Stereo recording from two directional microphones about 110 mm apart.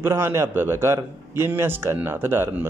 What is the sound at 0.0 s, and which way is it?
Speech, 25° right (ahead or behind).